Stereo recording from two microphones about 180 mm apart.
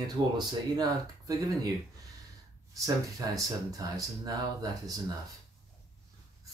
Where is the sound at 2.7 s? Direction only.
20° right (ahead or behind).